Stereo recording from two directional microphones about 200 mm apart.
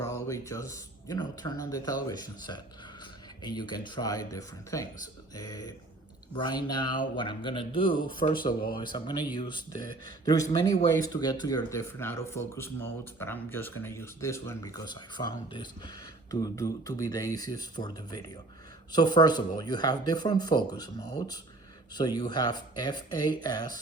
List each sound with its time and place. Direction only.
0.0 s speech: 15° left (ahead or behind)
21.9 s speech: 20° left (ahead or behind)